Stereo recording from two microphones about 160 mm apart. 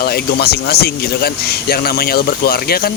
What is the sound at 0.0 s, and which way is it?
A man's voice, 80° left.